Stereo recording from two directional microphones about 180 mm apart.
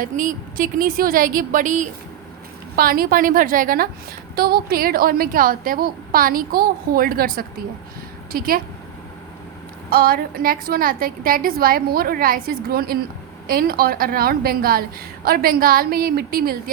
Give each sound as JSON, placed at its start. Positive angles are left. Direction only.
{"t": 0.0, "sound": "speech", "side_deg": -50}
{"t": 2.7, "sound": "a woman's voice", "side_deg": -55}
{"t": 9.9, "sound": "a woman's voice", "side_deg": -55}